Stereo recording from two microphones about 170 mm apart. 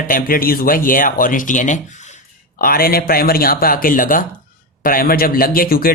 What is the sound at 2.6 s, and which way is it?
Speech, 60° left (ahead or behind).